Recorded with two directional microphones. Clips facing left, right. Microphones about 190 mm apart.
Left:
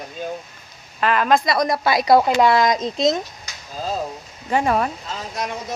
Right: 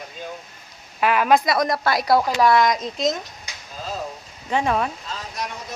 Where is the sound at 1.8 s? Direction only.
15° left (ahead or behind); by 3.1 s 30° left (ahead or behind).